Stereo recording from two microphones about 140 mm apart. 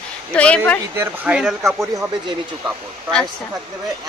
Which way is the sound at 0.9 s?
15° right (ahead or behind).